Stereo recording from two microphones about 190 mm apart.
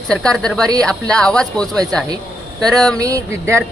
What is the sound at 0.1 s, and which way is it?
Speech, 5° left (ahead or behind).